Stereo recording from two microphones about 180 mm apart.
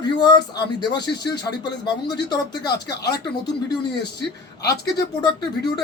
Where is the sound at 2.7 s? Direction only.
65° left (ahead or behind).